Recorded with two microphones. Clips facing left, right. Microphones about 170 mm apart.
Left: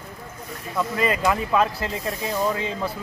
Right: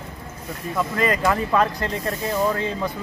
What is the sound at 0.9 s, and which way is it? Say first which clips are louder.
Speech: right 1 dB; 15° left (ahead or behind).